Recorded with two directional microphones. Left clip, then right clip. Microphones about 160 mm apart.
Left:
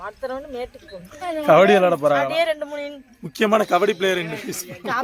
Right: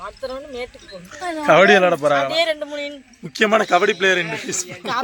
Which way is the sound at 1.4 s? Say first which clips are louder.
Right 1 dB; centre (ahead or behind).